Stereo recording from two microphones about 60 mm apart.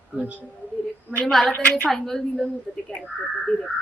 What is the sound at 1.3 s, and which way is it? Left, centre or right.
Speech, centre.